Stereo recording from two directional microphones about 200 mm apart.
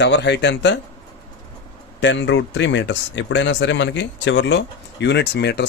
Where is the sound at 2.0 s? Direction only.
65° left (ahead or behind).